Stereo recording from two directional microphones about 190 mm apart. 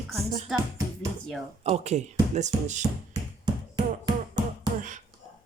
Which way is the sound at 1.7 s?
35° right (ahead or behind).